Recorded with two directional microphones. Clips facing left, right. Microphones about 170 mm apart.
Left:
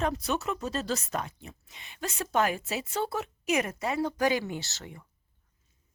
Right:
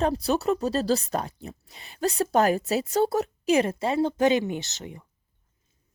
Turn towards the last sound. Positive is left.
turn(degrees=-20)  # may be behind; listen again after turning